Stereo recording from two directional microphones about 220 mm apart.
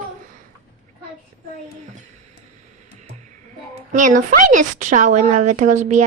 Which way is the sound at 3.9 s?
35° right (ahead or behind).